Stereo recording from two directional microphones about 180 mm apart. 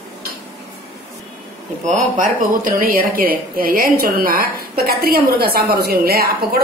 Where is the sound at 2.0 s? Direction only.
50° right (ahead or behind).